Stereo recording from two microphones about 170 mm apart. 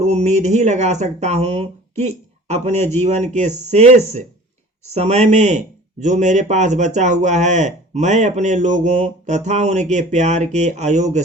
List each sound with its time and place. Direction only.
0.0 s speech: 40° right (ahead or behind)